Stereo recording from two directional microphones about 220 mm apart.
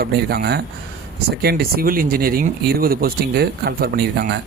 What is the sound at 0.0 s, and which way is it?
Speech, 45° right (ahead or behind).